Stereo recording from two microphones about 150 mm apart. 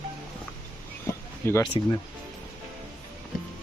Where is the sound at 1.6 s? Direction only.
30° left (ahead or behind).